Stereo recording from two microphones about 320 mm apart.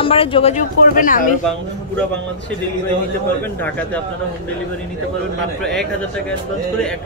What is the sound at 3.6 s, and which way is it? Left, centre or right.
Speech, centre.